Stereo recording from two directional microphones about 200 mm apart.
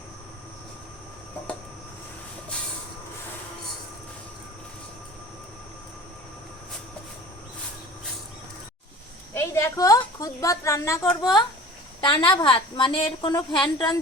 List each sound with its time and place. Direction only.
9.3 s a woman's voice: 15° left (ahead or behind)
11.9 s a woman's voice: 25° left (ahead or behind)